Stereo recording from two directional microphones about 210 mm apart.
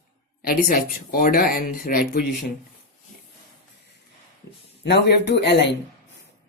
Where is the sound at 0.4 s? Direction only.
45° left (ahead or behind).